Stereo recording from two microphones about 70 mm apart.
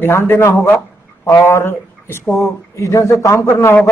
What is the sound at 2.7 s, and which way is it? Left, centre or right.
A man's voice, left.